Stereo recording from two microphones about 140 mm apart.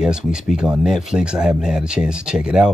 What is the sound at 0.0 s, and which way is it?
Speech, 5° right (ahead or behind).